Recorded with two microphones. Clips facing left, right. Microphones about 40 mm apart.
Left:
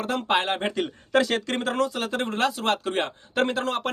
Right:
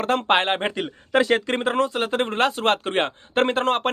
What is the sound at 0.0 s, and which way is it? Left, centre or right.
Speech, right.